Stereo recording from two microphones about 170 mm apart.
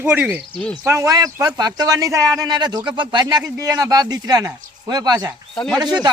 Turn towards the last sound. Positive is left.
turn(degrees=-25)  # may be behind; listen again after turning